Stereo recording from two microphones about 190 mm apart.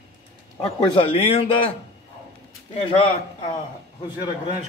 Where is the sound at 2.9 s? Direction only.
30° left (ahead or behind).